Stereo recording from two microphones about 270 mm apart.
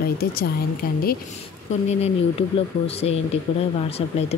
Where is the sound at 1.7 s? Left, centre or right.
Left.